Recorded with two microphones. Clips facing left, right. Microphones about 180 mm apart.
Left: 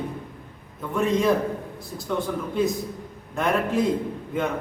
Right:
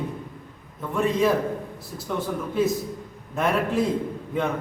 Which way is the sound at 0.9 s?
Centre (ahead or behind).